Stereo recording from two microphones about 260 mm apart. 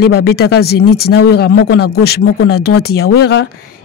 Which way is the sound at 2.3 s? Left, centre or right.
Left.